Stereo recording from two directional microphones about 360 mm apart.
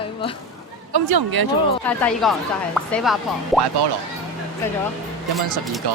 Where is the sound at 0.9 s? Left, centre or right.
Right.